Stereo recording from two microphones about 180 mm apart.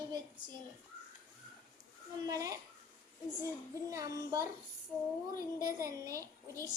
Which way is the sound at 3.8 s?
20° right (ahead or behind).